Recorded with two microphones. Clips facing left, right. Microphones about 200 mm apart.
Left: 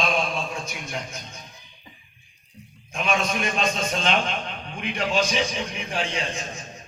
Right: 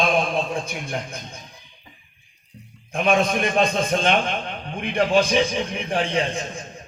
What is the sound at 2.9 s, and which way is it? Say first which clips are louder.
A man's voice: right 6 dB; 55° right (ahead or behind).